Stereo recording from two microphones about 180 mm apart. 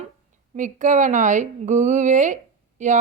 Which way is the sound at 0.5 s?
45° right (ahead or behind).